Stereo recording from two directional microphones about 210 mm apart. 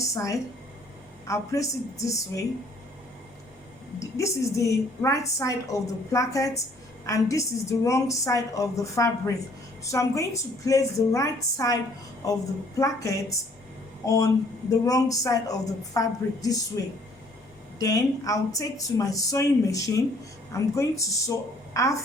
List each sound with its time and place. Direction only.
0.0 s a woman's voice: 15° left (ahead or behind)
4.0 s a woman's voice: 15° left (ahead or behind)